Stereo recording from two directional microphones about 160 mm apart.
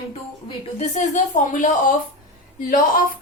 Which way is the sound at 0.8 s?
50° left (ahead or behind).